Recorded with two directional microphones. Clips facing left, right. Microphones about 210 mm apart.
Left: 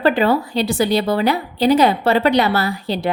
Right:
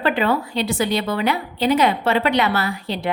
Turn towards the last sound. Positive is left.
turn(degrees=35)  # may be behind; listen again after turning